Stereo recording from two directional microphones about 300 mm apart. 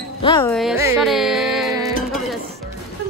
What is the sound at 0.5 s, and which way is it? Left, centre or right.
Carnatic music, centre.